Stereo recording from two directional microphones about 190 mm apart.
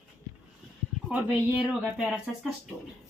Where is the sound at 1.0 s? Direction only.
5° right (ahead or behind).